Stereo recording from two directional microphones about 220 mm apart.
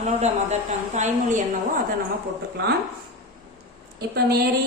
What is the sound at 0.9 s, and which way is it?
Speech, 35° right (ahead or behind).